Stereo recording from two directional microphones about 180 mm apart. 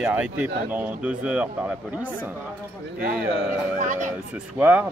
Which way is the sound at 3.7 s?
45° right (ahead or behind).